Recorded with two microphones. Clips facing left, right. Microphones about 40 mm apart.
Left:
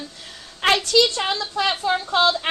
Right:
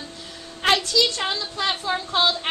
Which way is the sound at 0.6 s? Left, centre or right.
Left.